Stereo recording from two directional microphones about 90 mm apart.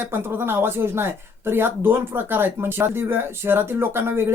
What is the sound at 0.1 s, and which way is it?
Speech, 25° right (ahead or behind).